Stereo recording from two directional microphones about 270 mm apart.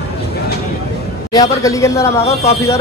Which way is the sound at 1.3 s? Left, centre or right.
Centre.